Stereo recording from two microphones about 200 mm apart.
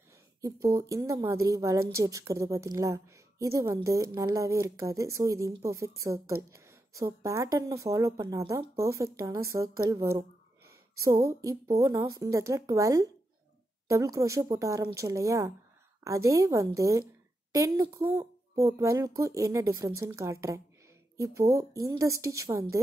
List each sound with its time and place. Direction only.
0.4 s a woman's voice: 15° right (ahead or behind)